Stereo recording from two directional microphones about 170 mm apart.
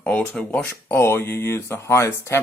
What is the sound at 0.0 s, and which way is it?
Speech, 5° left (ahead or behind).